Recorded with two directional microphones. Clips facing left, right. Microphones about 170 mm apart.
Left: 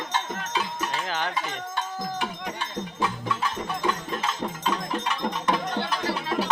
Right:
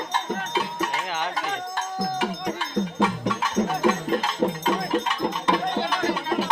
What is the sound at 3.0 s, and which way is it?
Music, 85° right.